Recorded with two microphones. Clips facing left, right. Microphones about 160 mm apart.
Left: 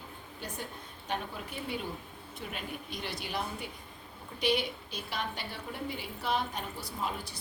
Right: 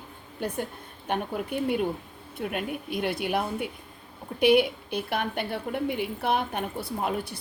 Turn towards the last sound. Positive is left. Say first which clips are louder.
# right 7 dB
turn(degrees=-60)  # may be behind; listen again after turning